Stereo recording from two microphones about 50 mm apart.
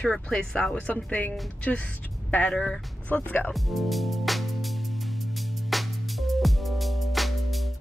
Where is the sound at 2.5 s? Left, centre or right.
Centre.